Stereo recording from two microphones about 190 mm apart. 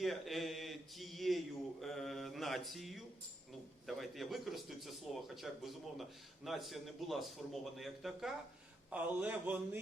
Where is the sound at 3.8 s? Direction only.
Centre (ahead or behind).